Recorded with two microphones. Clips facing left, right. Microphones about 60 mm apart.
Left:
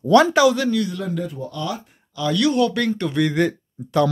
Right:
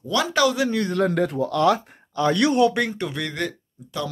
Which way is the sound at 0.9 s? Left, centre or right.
Right.